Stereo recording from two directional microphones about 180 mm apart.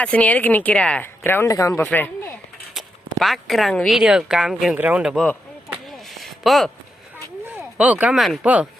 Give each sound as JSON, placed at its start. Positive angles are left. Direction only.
{"t": 0.0, "sound": "speech", "side_deg": 5}
{"t": 5.7, "sound": "a sound", "side_deg": 0}
{"t": 7.5, "sound": "speech", "side_deg": -5}